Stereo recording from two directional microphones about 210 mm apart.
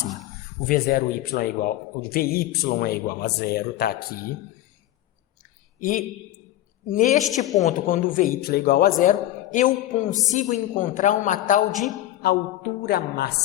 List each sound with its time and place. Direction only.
0.6 s speech: 45° left (ahead or behind)
5.8 s a man's voice: 40° left (ahead or behind)